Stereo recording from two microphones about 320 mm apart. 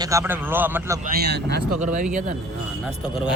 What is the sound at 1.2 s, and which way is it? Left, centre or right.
Speech, right.